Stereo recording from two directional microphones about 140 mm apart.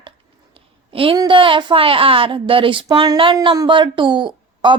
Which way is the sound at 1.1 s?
30° right (ahead or behind).